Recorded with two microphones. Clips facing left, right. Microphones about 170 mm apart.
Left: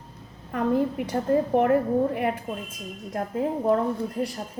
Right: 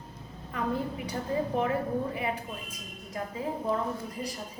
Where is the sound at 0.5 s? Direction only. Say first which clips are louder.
Left 8 dB; 55° left (ahead or behind).